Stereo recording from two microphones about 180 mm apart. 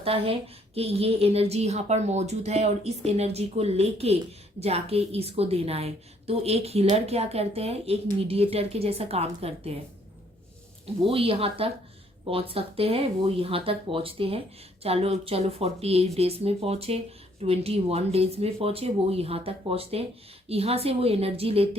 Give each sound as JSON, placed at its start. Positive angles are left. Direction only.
{"t": 0.0, "sound": "a woman's voice", "side_deg": -35}
{"t": 10.8, "sound": "a woman's voice", "side_deg": -30}